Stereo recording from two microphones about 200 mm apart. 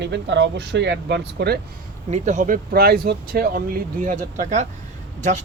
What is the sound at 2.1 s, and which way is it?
Speech, 35° right (ahead or behind).